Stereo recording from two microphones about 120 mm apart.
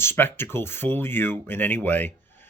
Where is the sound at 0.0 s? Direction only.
20° left (ahead or behind).